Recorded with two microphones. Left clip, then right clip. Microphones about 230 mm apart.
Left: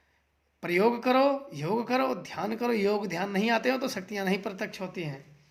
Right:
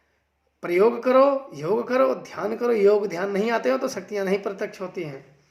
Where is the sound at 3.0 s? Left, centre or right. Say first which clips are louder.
Right 6 dB; left.